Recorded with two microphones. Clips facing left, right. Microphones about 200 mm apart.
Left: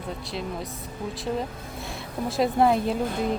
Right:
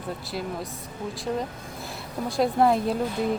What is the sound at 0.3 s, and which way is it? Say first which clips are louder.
Speech: even; centre (ahead or behind).